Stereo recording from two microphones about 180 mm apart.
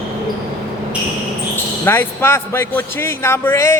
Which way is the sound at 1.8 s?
10° left (ahead or behind).